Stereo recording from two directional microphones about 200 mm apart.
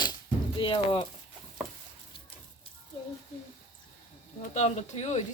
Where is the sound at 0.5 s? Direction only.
25° left (ahead or behind).